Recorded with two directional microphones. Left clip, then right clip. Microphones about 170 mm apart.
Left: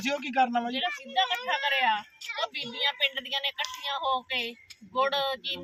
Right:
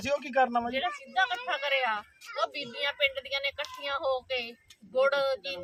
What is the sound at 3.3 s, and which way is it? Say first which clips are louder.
Speech: left 2 dB; 20° right (ahead or behind).